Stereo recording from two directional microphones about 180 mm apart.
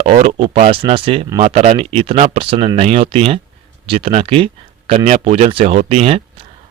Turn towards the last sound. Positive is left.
turn(degrees=-35)  # may be behind; listen again after turning